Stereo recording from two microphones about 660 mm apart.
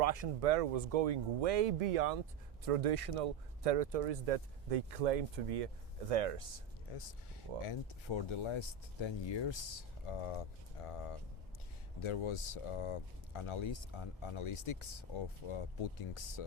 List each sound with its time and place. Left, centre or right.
0.0 s speech: right
2.6 s speech: right
7.6 s speech: left